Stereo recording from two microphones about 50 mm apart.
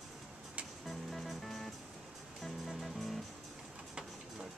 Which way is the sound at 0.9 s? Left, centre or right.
Centre.